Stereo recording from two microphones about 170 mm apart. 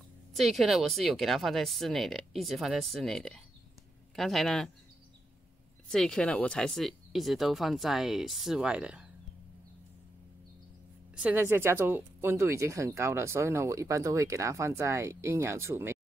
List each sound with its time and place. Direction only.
0.3 s speech: centre (ahead or behind)
5.9 s speech: 5° left (ahead or behind)
11.1 s speech: 10° right (ahead or behind)